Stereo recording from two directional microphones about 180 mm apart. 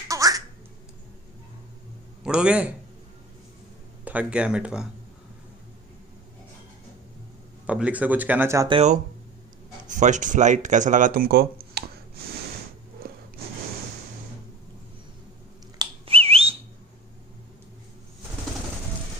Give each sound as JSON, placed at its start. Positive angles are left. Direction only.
{"t": 0.1, "sound": "a sound", "side_deg": -20}
{"t": 2.2, "sound": "speech", "side_deg": -5}
{"t": 4.0, "sound": "speech", "side_deg": -10}
{"t": 7.6, "sound": "speech", "side_deg": -5}
{"t": 8.6, "sound": "speech", "side_deg": -30}
{"t": 9.8, "sound": "speech", "side_deg": -45}
{"t": 11.8, "sound": "a sound", "side_deg": -65}
{"t": 13.0, "sound": "snort", "side_deg": -60}
{"t": 15.8, "sound": "whistle", "side_deg": -30}